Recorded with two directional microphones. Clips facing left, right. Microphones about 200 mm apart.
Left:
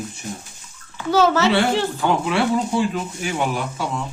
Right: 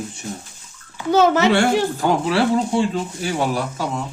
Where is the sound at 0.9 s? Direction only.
20° right (ahead or behind).